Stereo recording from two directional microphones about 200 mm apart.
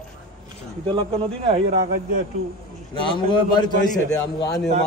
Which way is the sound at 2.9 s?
25° left (ahead or behind).